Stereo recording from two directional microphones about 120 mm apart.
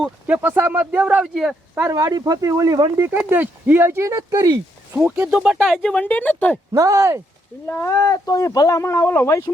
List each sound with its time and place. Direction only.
0.3 s speech: 15° right (ahead or behind)
1.9 s speech: 30° right (ahead or behind)
3.0 s speech: 15° right (ahead or behind)
5.1 s speech: 15° right (ahead or behind)
5.4 s speech: 5° right (ahead or behind)
5.9 s speech: 15° left (ahead or behind)
6.7 s speech: 25° right (ahead or behind)
7.7 s speech: 25° left (ahead or behind)